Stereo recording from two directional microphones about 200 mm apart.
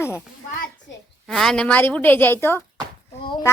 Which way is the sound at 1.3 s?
Centre (ahead or behind).